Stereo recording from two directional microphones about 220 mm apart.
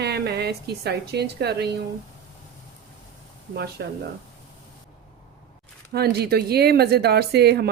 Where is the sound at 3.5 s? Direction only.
45° right (ahead or behind).